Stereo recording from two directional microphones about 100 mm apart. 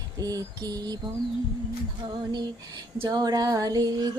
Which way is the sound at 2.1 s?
50° right (ahead or behind).